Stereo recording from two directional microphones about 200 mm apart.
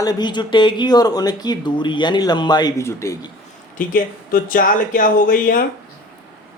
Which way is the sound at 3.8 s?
45° left (ahead or behind).